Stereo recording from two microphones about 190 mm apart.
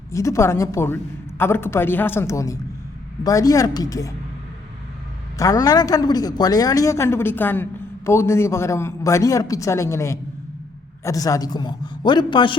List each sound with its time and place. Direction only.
0.1 s a woman's voice: 15° left (ahead or behind)
5.4 s a woman's voice: 20° left (ahead or behind)